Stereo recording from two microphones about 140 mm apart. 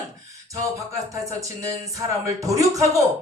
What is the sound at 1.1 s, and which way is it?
Speech, 25° right (ahead or behind).